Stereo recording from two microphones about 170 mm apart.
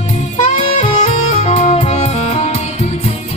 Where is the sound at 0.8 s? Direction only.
40° left (ahead or behind).